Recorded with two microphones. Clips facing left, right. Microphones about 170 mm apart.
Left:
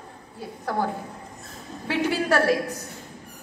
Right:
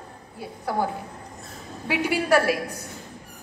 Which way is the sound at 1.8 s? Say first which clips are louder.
Right 1 dB; 10° right (ahead or behind).